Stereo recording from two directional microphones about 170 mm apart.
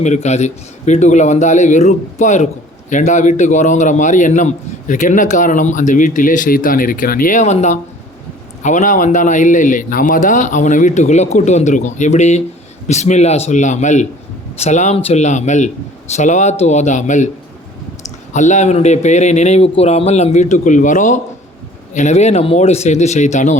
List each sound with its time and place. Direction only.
0.0 s a man's voice: 40° left (ahead or behind)
18.3 s a man's voice: 45° left (ahead or behind)